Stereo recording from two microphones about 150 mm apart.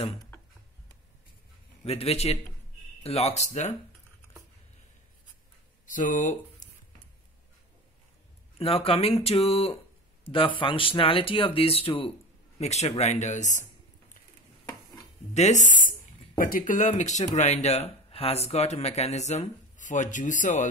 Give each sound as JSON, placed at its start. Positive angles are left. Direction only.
{"t": 1.9, "sound": "speech", "side_deg": 45}
{"t": 5.9, "sound": "speech", "side_deg": 60}
{"t": 8.5, "sound": "speech", "side_deg": 40}
{"t": 15.3, "sound": "speech", "side_deg": 50}
{"t": 16.3, "sound": "speech", "side_deg": 70}